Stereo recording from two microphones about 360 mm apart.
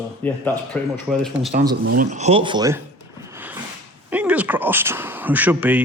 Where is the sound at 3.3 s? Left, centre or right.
Centre.